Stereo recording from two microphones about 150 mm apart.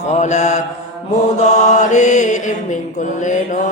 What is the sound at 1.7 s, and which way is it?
Mantra, 55° left (ahead or behind).